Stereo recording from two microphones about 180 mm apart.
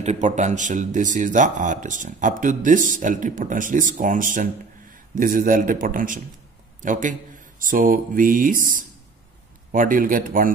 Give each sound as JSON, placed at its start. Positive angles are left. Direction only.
{"t": 0.0, "sound": "speech", "side_deg": -40}